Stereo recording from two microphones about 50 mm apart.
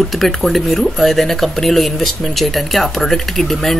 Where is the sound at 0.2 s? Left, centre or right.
Centre.